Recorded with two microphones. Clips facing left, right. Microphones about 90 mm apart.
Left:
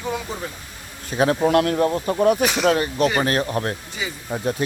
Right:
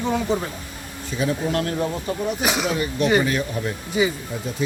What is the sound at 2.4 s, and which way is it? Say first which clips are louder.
Speech: left 2 dB; 5° right (ahead or behind).